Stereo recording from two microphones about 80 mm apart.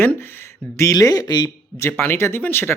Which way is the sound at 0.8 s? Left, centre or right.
Left.